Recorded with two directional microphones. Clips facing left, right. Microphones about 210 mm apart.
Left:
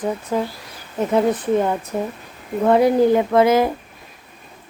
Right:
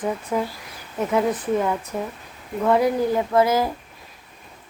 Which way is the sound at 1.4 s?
25° left (ahead or behind).